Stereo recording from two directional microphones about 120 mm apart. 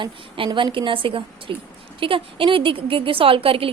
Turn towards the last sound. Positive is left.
turn(degrees=-50)  # may be behind; listen again after turning